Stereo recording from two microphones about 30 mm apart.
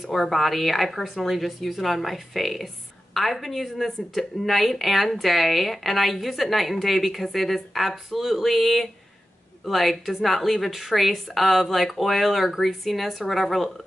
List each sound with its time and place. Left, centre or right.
0.0 s speech: centre